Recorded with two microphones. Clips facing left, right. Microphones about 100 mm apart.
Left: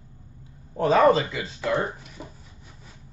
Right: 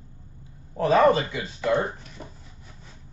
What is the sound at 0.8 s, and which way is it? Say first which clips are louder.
Speech: even; 30° left (ahead or behind).